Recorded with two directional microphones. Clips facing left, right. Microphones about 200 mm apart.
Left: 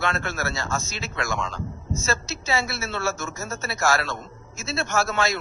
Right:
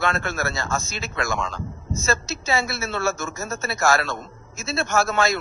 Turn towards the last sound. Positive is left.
turn(degrees=-50)  # may be behind; listen again after turning